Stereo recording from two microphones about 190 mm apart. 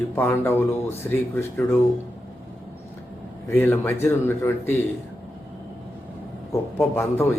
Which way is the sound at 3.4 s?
10° left (ahead or behind).